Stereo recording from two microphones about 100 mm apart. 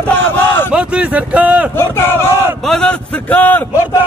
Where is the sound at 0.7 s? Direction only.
10° right (ahead or behind).